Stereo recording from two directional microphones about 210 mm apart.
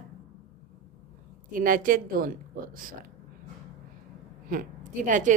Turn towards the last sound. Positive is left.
turn(degrees=-40)  # may be behind; listen again after turning